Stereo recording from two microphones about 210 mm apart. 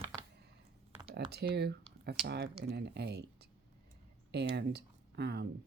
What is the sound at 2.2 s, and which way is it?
Speech, 50° right (ahead or behind).